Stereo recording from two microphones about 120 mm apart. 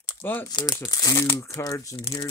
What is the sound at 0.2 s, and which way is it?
Speech, 15° left (ahead or behind).